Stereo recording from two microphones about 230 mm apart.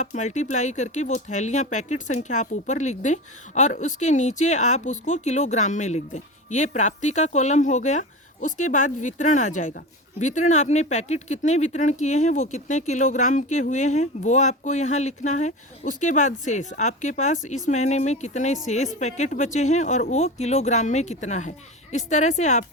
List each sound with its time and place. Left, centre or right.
0.0 s speech: left